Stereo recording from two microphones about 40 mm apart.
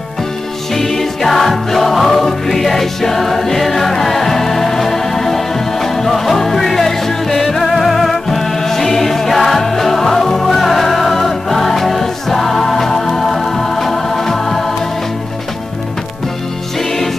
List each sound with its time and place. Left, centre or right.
0.7 s music: centre